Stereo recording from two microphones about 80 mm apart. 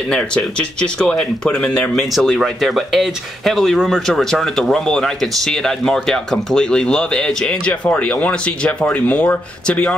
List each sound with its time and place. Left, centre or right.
0.1 s speech: centre